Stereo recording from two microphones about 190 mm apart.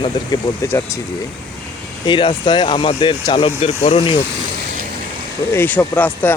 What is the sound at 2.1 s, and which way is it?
Speech, 25° left (ahead or behind).